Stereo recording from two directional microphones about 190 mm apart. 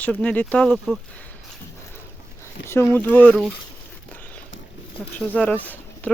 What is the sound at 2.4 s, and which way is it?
Speech, 15° left (ahead or behind).